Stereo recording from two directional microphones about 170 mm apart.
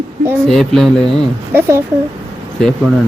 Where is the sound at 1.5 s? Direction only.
15° right (ahead or behind).